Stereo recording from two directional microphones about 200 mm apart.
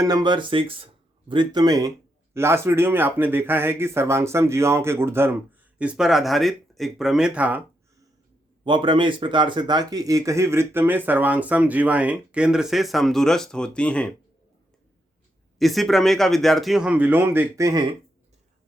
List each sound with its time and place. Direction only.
0.0 s speech: 20° right (ahead or behind)
8.6 s speech: 25° right (ahead or behind); by 14.1 s 5° left (ahead or behind)
15.5 s speech: centre (ahead or behind); by 17.8 s 15° right (ahead or behind)